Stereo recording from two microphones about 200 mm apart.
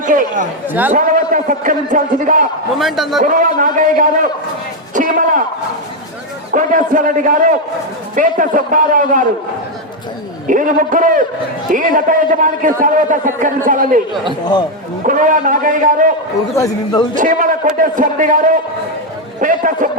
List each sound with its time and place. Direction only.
0.0 s speech: 40° right (ahead or behind)
0.7 s a man's voice: 10° right (ahead or behind)
0.9 s a man's voice: 40° right (ahead or behind)
2.7 s a man's voice: centre (ahead or behind)
3.2 s a man's voice: 40° right (ahead or behind)
6.5 s a man's voice: 40° right (ahead or behind)
10.5 s a man's voice: 40° right (ahead or behind)
15.0 s a man's voice: 40° right (ahead or behind)
16.6 s speech: 20° left (ahead or behind)
17.2 s a man's voice: 40° right (ahead or behind)